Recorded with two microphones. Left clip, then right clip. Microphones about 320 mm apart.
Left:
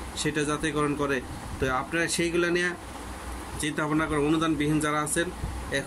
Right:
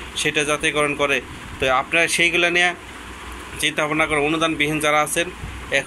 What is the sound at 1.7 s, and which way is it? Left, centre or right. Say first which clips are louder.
Speech: right 10 dB; centre.